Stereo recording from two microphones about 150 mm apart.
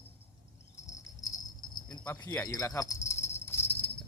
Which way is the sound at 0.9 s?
25° left (ahead or behind).